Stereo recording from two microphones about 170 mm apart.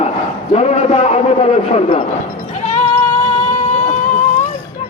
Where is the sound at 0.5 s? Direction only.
40° left (ahead or behind).